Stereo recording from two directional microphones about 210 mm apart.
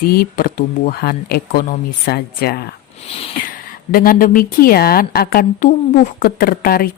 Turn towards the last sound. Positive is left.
turn(degrees=45)  # may be behind; listen again after turning